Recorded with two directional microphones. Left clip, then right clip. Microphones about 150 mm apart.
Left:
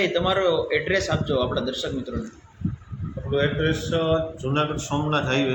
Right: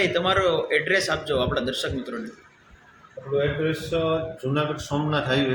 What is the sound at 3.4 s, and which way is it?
A man's voice, 5° right (ahead or behind).